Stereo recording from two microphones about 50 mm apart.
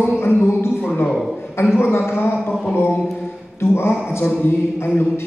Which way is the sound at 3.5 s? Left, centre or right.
Left.